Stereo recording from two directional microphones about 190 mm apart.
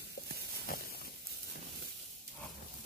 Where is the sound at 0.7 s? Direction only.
50° left (ahead or behind).